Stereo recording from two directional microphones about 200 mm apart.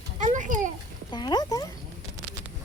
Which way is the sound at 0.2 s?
40° right (ahead or behind).